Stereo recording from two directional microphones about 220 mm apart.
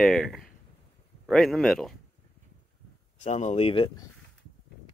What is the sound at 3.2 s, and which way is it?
Speech, 30° left (ahead or behind).